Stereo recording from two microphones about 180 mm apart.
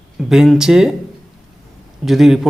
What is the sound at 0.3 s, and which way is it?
Speech, centre (ahead or behind).